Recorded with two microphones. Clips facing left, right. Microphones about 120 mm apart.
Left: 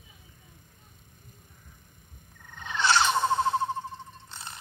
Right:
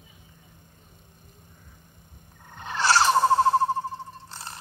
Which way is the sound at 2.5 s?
40° right (ahead or behind).